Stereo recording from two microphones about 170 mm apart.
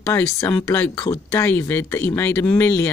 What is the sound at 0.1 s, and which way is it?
Speech, 20° left (ahead or behind).